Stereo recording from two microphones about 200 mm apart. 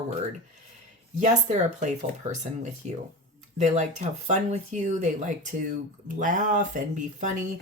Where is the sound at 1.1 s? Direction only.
35° right (ahead or behind).